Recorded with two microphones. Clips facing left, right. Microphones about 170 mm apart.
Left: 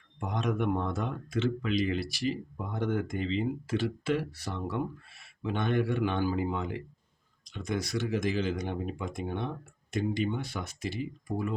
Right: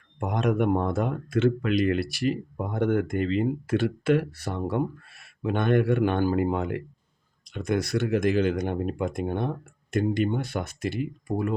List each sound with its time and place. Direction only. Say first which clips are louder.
0.2 s speech: right 6 dB; 60° right (ahead or behind)